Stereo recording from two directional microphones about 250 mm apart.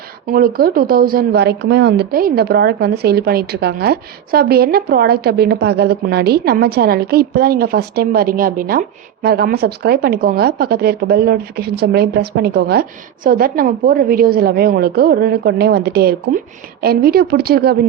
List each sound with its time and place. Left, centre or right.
0.3 s speech: right